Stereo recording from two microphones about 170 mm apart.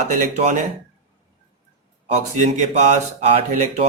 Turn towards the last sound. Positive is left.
turn(degrees=-40)  # may be behind; listen again after turning